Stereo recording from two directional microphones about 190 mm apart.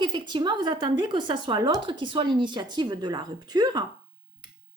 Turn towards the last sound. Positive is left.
turn(degrees=-20)  # may be behind; listen again after turning